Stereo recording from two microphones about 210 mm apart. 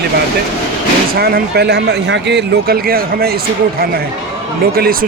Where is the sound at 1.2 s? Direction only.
50° right (ahead or behind).